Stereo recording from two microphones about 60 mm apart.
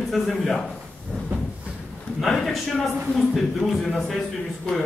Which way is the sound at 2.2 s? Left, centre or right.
Centre.